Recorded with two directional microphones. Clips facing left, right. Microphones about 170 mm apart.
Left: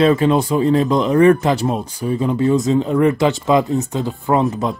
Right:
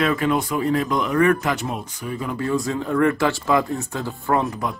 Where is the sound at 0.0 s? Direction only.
30° left (ahead or behind).